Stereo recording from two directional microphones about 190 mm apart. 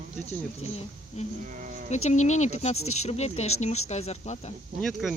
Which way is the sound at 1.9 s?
35° left (ahead or behind).